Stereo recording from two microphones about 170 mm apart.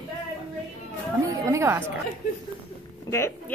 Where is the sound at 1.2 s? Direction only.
20° right (ahead or behind).